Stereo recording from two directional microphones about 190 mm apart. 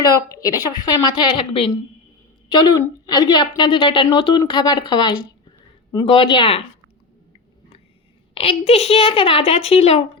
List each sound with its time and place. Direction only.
0.0 s a woman's voice: 20° left (ahead or behind)
8.4 s a woman's voice: 30° left (ahead or behind)